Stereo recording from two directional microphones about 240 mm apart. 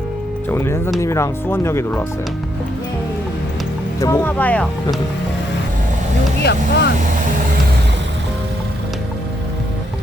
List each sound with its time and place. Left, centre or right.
0.4 s speech: centre
4.0 s speech: centre
6.4 s speech: left